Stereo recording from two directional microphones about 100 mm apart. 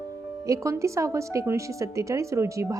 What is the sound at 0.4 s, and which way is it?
A woman's voice, 30° right (ahead or behind).